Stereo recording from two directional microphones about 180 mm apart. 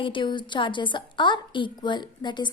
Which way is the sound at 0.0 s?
25° left (ahead or behind).